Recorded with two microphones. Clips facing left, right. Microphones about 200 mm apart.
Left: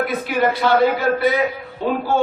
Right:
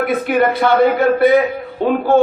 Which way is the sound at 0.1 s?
55° right (ahead or behind).